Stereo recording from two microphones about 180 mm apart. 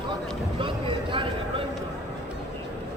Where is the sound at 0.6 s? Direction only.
30° right (ahead or behind).